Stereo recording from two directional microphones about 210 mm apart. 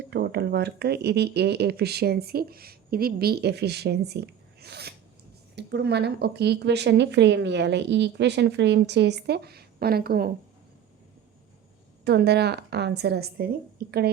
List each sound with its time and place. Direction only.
0.1 s speech: 50° right (ahead or behind)
12.0 s speech: 50° right (ahead or behind)